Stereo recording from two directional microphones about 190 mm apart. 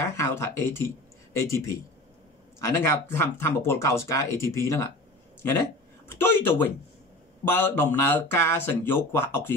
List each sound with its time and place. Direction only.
0.0 s speech: 15° left (ahead or behind)
6.0 s speech: 10° left (ahead or behind)